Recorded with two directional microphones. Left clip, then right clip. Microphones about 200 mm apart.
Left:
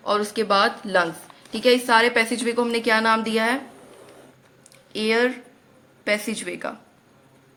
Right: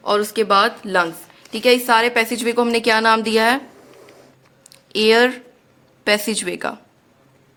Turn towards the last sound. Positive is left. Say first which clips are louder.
# right 6 dB
turn(degrees=-45)  # may be behind; listen again after turning